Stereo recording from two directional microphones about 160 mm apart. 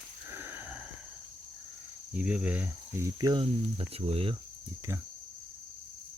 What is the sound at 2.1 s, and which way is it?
Speech, 10° right (ahead or behind).